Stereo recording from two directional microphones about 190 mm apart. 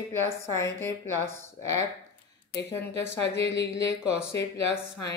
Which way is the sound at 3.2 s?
65° left (ahead or behind).